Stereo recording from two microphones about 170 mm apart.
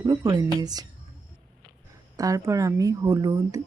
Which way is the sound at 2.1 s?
20° right (ahead or behind).